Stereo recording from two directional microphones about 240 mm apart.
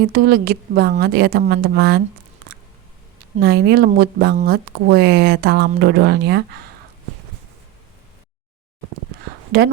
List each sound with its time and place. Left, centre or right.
0.0 s speech: right
3.4 s speech: right
9.5 s speech: right